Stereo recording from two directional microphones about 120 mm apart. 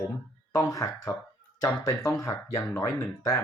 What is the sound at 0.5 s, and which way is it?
Speech, 30° left (ahead or behind).